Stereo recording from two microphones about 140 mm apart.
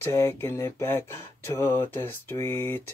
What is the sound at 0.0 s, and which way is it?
Speech, 20° left (ahead or behind).